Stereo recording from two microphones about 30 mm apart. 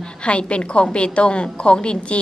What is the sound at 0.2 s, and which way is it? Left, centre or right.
A woman's voice, left.